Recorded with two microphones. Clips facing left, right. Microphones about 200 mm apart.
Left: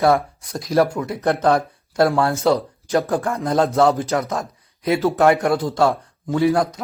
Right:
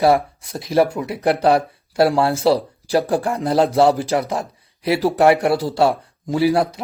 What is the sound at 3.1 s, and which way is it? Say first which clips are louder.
Speech: right 2 dB; 10° right (ahead or behind).